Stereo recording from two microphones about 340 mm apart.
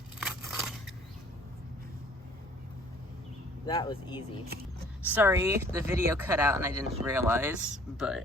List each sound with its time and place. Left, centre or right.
0.2 s scissors: centre
3.7 s speech: centre
5.0 s speech: centre